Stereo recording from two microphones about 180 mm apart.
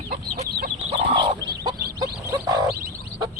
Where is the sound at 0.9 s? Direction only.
30° right (ahead or behind).